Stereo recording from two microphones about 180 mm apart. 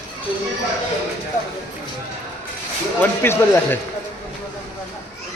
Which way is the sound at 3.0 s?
10° left (ahead or behind).